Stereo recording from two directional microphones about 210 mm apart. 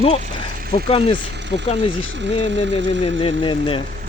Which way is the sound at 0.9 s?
25° left (ahead or behind).